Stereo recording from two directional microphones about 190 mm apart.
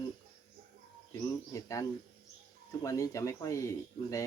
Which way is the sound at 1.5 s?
15° left (ahead or behind).